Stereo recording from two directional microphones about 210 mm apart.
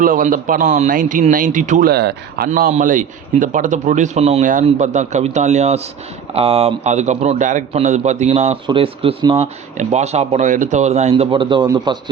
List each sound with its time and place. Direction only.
0.0 s a man's voice: 40° right (ahead or behind)
2.5 s a man's voice: 40° right (ahead or behind); by 11.9 s 20° right (ahead or behind)